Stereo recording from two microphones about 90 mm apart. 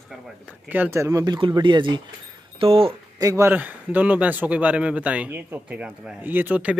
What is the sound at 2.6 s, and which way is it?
Speech, 90° right.